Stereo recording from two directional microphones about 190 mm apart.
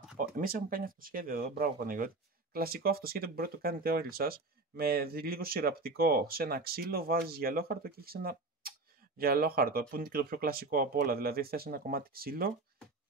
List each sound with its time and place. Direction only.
0.2 s speech: 50° right (ahead or behind)